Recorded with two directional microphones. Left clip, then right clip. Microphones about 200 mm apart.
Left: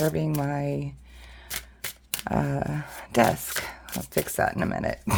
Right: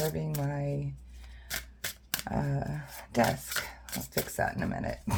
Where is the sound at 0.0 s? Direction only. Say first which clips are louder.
Left 7 dB; 50° left (ahead or behind).